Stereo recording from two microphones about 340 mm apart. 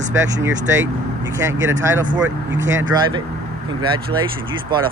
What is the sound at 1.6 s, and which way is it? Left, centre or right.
Speech, right.